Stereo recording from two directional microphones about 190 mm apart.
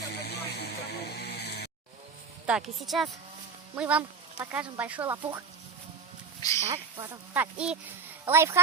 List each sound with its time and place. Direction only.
0.1 s a sound: 60° left (ahead or behind)
2.5 s speech: centre (ahead or behind)
6.4 s speech: 20° left (ahead or behind)
7.0 s speech: 15° right (ahead or behind)
8.2 s speech: 15° right (ahead or behind)